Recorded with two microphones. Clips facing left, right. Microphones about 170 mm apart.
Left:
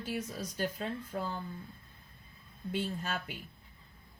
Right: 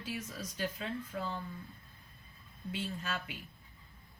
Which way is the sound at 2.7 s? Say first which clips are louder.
Left 3 dB; 50° left (ahead or behind).